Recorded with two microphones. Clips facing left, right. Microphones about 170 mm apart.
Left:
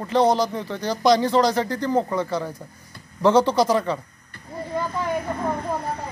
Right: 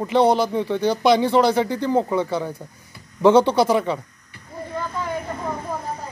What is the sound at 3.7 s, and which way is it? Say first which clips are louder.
Speech: right 2 dB; 15° right (ahead or behind).